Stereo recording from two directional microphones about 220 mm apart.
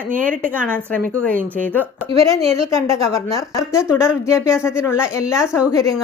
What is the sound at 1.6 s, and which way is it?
A woman's voice, 10° left (ahead or behind).